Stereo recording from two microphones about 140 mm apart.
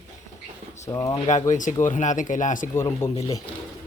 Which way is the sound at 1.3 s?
65° left (ahead or behind).